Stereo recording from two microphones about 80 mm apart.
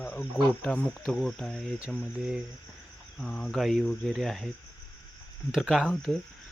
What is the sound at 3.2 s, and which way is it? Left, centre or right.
Speech, centre.